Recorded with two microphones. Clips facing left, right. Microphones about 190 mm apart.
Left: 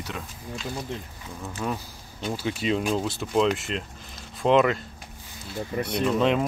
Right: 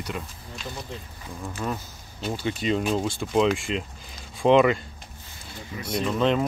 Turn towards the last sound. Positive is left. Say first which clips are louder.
# left 1 dB
turn(degrees=0)  # may be behind; listen again after turning